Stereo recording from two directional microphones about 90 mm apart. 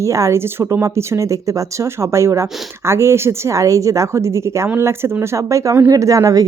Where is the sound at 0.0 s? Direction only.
35° right (ahead or behind).